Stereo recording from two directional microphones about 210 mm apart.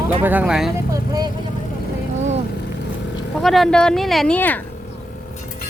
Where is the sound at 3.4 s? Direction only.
Centre (ahead or behind).